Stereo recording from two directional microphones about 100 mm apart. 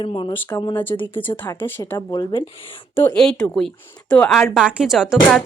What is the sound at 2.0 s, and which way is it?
Speech, 40° left (ahead or behind).